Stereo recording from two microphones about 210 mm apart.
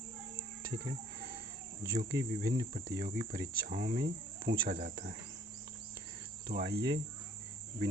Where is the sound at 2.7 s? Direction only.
45° right (ahead or behind).